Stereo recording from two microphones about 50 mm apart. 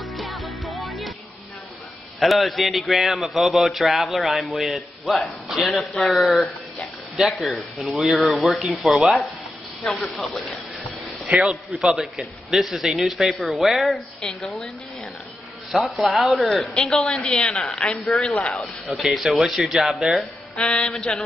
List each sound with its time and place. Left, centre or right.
0.0 s music: centre
2.1 s a man's voice: centre
11.3 s a man's voice: right
11.7 s a man's voice: centre
15.7 s a man's voice: centre
16.9 s a woman's voice: centre
20.5 s mantra: centre